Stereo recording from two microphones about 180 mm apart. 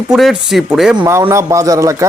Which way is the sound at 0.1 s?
Centre (ahead or behind).